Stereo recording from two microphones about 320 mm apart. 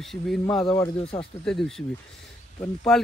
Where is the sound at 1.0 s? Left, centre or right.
Centre.